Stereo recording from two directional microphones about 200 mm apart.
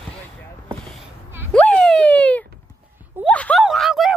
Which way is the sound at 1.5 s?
5° left (ahead or behind).